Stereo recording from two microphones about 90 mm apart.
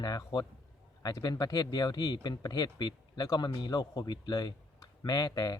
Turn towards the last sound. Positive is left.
turn(degrees=45)  # may be behind; listen again after turning